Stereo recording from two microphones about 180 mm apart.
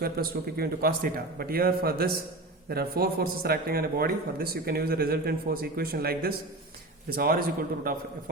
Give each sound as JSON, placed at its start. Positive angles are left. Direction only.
{"t": 0.0, "sound": "speech", "side_deg": -55}